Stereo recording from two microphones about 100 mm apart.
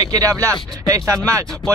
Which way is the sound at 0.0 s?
35° right (ahead or behind).